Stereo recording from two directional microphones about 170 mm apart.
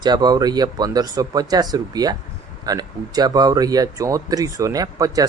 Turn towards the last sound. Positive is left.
turn(degrees=-20)  # may be behind; listen again after turning